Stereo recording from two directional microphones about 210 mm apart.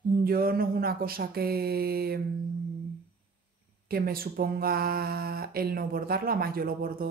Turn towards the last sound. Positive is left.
turn(degrees=-45)  # may be behind; listen again after turning